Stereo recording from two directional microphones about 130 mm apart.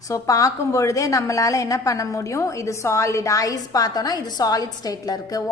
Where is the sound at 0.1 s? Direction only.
25° left (ahead or behind).